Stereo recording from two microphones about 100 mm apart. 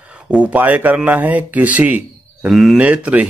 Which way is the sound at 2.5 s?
5° right (ahead or behind).